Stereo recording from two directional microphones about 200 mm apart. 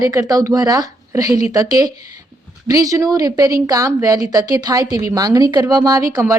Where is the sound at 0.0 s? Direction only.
15° right (ahead or behind).